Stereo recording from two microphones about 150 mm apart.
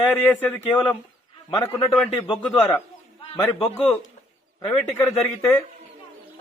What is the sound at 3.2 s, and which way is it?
Speech, 40° left (ahead or behind).